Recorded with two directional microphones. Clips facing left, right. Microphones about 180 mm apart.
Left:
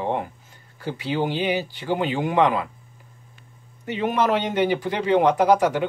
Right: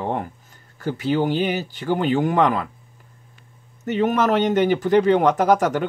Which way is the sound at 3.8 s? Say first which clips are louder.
Right 3 dB; 45° right (ahead or behind).